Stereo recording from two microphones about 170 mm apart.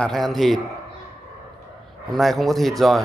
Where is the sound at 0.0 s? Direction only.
Centre (ahead or behind).